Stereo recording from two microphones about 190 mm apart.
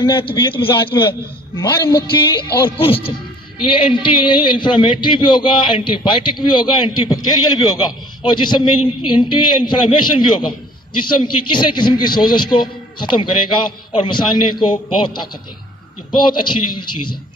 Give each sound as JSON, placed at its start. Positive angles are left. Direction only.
{"t": 0.0, "sound": "a man's voice", "side_deg": 25}
{"t": 16.2, "sound": "a man's voice", "side_deg": 25}